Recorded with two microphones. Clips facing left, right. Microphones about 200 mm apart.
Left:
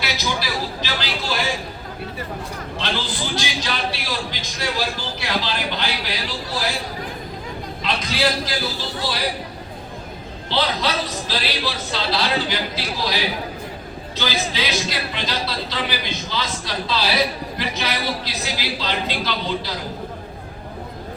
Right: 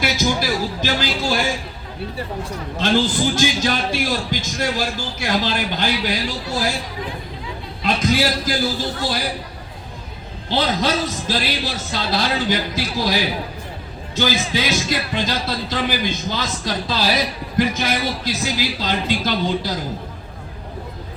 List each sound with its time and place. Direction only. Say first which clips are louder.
0.0 s a sound: right 5 dB; 50° right (ahead or behind)
2.7 s a man's voice: right 9 dB; 50° right (ahead or behind)
7.9 s a man's voice: right 4 dB; 50° right (ahead or behind)
10.5 s a man's voice: right 3 dB; 45° right (ahead or behind)
14.2 s a man's voice: right 4 dB; 45° right (ahead or behind)